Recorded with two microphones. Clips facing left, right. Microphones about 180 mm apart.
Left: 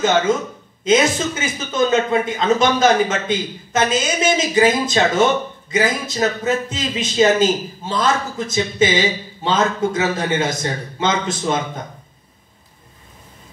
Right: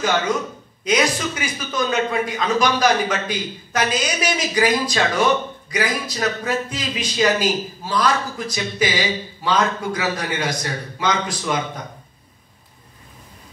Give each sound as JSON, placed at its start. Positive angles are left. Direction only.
{"t": 0.3, "sound": "a man's voice", "side_deg": 25}